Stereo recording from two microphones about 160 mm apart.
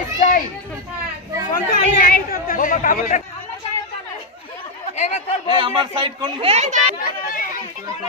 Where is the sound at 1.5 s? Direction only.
60° left (ahead or behind).